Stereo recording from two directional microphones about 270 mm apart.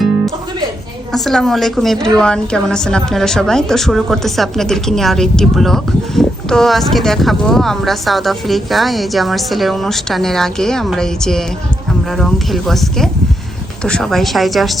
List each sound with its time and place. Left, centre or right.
1.1 s a woman's voice: centre